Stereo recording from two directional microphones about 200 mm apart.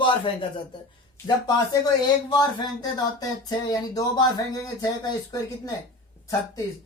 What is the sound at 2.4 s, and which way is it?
A man's voice, 20° left (ahead or behind).